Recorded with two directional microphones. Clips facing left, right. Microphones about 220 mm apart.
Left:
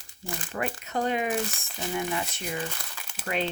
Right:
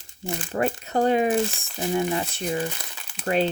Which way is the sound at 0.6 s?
35° right (ahead or behind).